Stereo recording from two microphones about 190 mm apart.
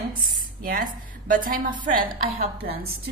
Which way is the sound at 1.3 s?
45° right (ahead or behind).